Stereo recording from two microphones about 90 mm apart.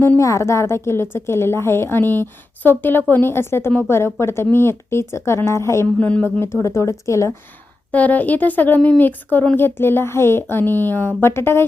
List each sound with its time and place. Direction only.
0.2 s a woman's voice: 35° left (ahead or behind)
6.0 s speech: 15° left (ahead or behind)
6.4 s speech: 30° left (ahead or behind)
7.9 s a woman's voice: 15° left (ahead or behind)